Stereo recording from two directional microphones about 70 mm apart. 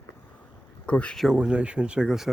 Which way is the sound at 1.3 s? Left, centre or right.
Centre.